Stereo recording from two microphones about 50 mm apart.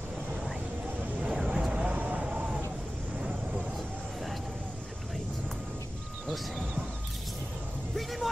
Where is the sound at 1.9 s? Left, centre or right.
Right.